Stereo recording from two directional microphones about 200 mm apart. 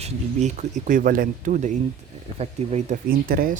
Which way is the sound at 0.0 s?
35° right (ahead or behind).